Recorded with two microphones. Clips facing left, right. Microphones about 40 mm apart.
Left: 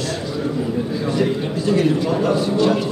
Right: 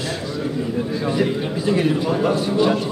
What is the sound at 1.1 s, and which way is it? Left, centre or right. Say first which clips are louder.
A man's voice: left 1 dB; centre.